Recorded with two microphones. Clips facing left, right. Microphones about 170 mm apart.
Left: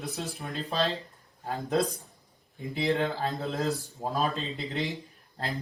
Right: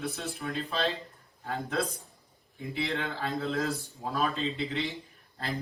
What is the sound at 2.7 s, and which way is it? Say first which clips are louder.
Speech: left 6 dB; 40° left (ahead or behind).